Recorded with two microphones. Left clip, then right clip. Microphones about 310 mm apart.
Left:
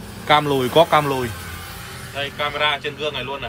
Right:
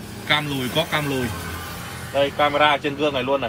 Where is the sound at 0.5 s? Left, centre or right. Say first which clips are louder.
Left 8 dB; centre.